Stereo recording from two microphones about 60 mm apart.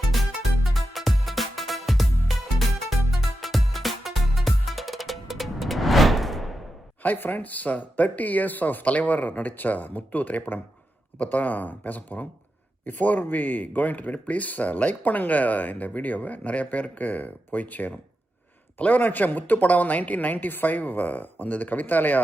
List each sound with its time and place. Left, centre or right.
0.7 s music: centre
7.0 s speech: left